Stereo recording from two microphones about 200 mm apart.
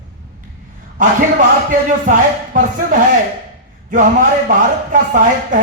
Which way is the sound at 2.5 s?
40° right (ahead or behind).